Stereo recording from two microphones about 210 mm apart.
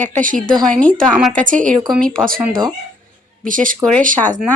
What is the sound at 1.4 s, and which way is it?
Speech, 40° right (ahead or behind).